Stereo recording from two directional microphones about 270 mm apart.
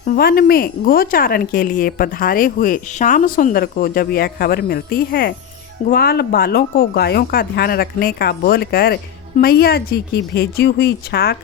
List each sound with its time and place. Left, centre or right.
0.0 s speech: left